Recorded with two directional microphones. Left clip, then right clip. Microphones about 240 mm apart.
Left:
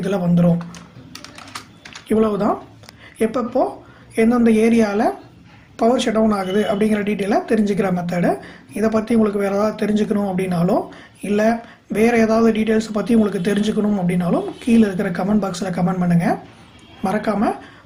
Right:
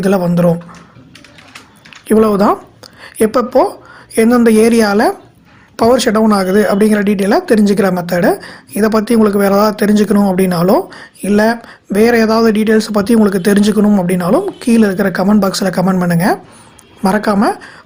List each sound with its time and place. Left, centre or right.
0.0 s speech: right
2.0 s a woman's voice: right